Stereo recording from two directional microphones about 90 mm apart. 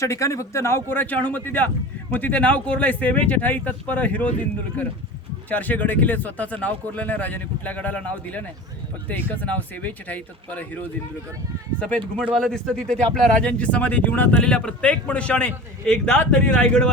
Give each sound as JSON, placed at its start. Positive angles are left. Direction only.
{"t": 0.0, "sound": "a man's voice", "side_deg": 35}